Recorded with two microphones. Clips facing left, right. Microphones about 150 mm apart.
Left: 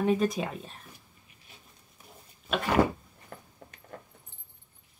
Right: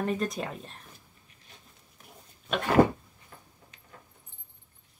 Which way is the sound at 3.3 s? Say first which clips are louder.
Left 6 dB; 55° left (ahead or behind).